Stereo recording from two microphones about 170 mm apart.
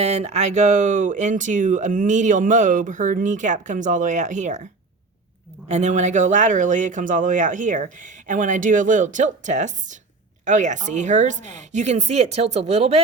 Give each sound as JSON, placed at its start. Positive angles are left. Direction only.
{"t": 0.0, "sound": "speech", "side_deg": -40}